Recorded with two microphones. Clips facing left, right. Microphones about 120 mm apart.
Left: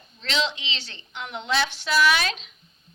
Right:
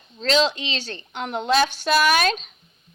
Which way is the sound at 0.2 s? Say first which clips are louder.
Right 7 dB; 45° right (ahead or behind).